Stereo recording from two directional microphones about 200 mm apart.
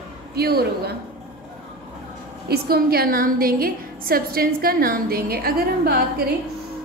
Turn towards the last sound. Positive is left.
turn(degrees=-50)  # may be behind; listen again after turning